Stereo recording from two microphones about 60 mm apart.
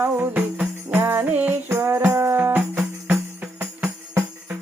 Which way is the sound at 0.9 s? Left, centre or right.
Right.